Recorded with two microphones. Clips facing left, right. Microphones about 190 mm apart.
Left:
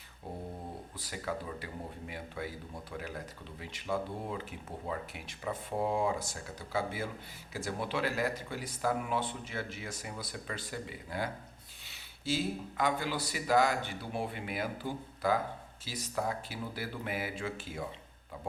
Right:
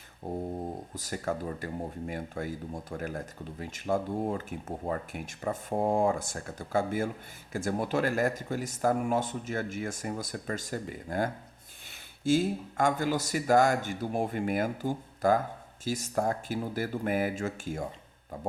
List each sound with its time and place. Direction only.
0.2 s speech: 45° right (ahead or behind)